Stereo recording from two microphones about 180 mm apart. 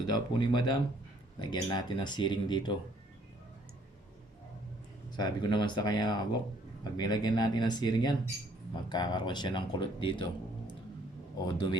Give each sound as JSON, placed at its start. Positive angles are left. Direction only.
{"t": 0.0, "sound": "speech", "side_deg": 25}
{"t": 5.1, "sound": "speech", "side_deg": 25}
{"t": 11.3, "sound": "speech", "side_deg": 25}